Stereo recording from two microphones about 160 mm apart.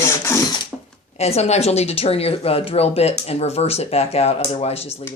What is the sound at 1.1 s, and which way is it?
Speech, 40° left (ahead or behind).